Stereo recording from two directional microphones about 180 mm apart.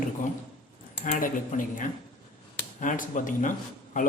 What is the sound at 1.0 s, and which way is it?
A man's voice, 45° left (ahead or behind).